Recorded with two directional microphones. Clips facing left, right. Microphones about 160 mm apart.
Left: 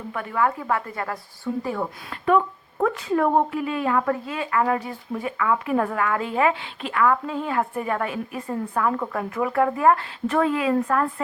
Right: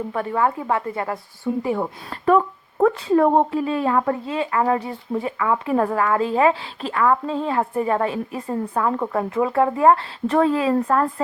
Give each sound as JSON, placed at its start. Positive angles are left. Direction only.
{"t": 0.1, "sound": "a woman's voice", "side_deg": -30}
{"t": 2.0, "sound": "a woman's voice", "side_deg": -35}